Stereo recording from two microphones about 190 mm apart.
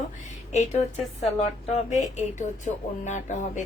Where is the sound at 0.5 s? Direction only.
35° left (ahead or behind).